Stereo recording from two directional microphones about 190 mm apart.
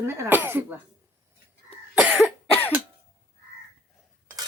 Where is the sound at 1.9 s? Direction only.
5° right (ahead or behind).